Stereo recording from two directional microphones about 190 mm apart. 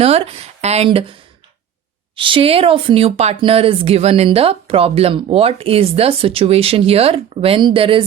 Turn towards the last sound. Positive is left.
turn(degrees=-30)  # may be behind; listen again after turning